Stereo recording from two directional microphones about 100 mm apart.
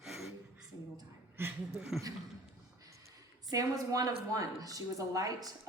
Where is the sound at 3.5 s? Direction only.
35° right (ahead or behind).